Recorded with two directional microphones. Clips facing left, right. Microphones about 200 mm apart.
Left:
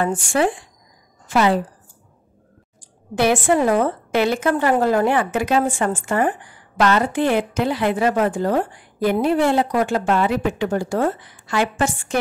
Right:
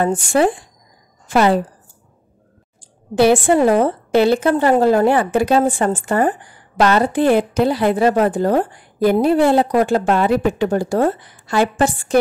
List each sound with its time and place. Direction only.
0.0 s a woman's voice: 35° right (ahead or behind)
2.8 s a woman's voice: 30° right (ahead or behind)